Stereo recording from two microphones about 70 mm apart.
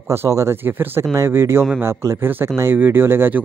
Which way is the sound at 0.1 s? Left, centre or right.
Right.